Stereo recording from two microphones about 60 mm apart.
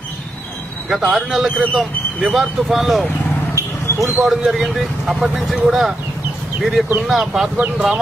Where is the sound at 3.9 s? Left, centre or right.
Left.